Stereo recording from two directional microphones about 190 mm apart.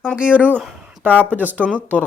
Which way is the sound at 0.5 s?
5° left (ahead or behind).